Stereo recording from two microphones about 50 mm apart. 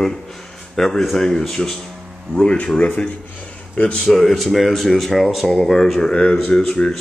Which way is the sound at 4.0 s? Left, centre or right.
Centre.